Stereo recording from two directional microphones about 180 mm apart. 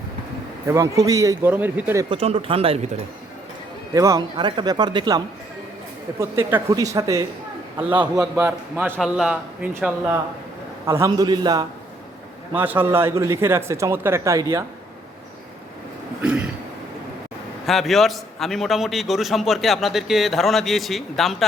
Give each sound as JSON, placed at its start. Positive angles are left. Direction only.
{"t": 0.7, "sound": "a man's voice", "side_deg": -20}
{"t": 2.0, "sound": "speech", "side_deg": -30}
{"t": 3.9, "sound": "a man's voice", "side_deg": -20}
{"t": 8.4, "sound": "a man's voice", "side_deg": -10}
{"t": 10.8, "sound": "a man's voice", "side_deg": -15}
{"t": 12.5, "sound": "a man's voice", "side_deg": -10}
{"t": 16.2, "sound": "throat clearing", "side_deg": -5}
{"t": 17.7, "sound": "a man's voice", "side_deg": 0}